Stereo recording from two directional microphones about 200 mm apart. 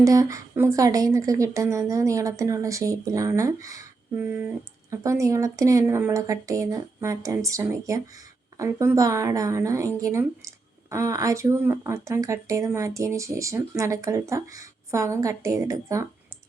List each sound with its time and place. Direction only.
0.0 s a woman's voice: 15° right (ahead or behind)